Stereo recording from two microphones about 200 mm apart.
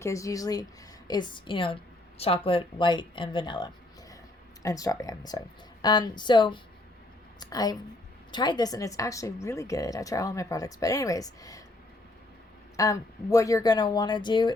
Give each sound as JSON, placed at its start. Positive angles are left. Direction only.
{"t": 0.0, "sound": "a woman's voice", "side_deg": 15}
{"t": 12.7, "sound": "a woman's voice", "side_deg": 15}